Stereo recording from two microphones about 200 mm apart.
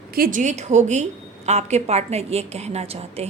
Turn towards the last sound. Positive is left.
turn(degrees=-30)  # may be behind; listen again after turning